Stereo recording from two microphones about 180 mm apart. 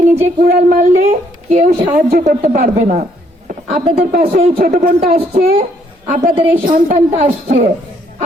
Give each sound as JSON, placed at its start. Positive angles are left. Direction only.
{"t": 0.3, "sound": "a woman's voice", "side_deg": -50}
{"t": 5.3, "sound": "a woman's voice", "side_deg": -35}